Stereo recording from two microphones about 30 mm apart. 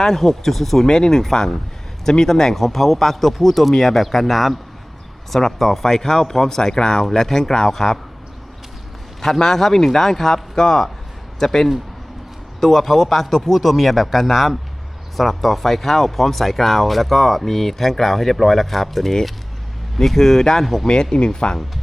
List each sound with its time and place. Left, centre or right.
0.0 s speech: centre
0.9 s speech: centre
7.0 s speech: centre
7.7 s speech: centre
9.2 s speech: centre
20.8 s speech: left